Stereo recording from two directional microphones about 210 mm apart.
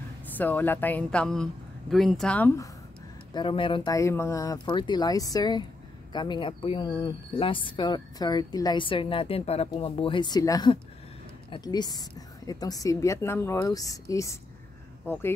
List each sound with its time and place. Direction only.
0.4 s a woman's voice: 10° left (ahead or behind)
3.3 s a woman's voice: 25° left (ahead or behind)